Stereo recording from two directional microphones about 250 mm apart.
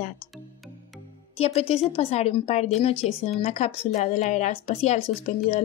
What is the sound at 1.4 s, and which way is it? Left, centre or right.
A woman's voice, left.